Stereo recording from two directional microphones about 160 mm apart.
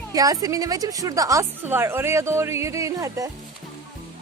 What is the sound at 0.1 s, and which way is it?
A woman's voice, 20° right (ahead or behind).